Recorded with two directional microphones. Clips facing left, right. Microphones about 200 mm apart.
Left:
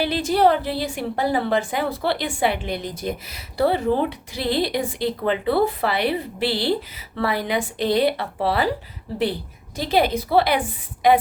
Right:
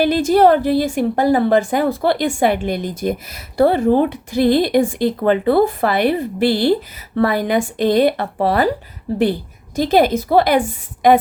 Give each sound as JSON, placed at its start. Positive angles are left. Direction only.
{"t": 0.0, "sound": "a woman's voice", "side_deg": -45}
{"t": 9.7, "sound": "a woman's voice", "side_deg": -45}